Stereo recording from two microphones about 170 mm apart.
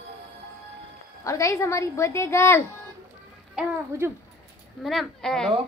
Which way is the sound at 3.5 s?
15° right (ahead or behind).